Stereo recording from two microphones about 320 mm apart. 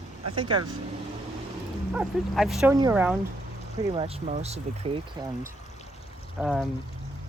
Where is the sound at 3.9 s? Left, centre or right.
Centre.